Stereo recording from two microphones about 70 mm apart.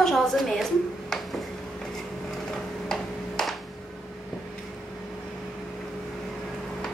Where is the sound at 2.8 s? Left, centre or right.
Centre.